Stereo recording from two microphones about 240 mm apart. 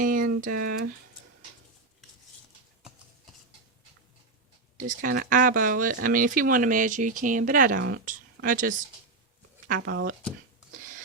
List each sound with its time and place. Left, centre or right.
0.0 s speech: right
4.8 s speech: right